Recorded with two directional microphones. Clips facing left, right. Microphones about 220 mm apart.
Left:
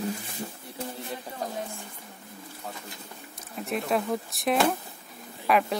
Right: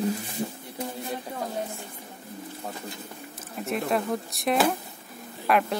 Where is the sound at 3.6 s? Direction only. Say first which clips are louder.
Right 1 dB; centre (ahead or behind).